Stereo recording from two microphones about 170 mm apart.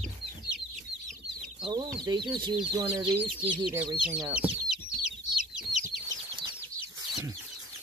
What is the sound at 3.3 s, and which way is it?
Speech, 5° right (ahead or behind).